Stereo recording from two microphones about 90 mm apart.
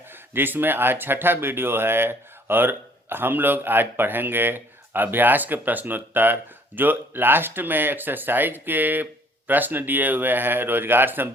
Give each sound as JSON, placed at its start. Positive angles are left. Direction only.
{"t": 0.1, "sound": "speech", "side_deg": -25}